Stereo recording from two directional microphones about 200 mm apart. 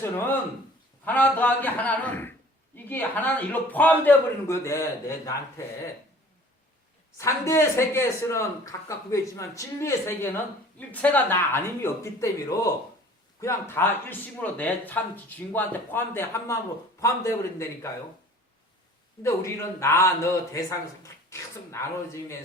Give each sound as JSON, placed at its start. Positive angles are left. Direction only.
{"t": 1.0, "sound": "speech", "side_deg": 10}
{"t": 7.2, "sound": "speech", "side_deg": 15}
{"t": 19.2, "sound": "speech", "side_deg": 15}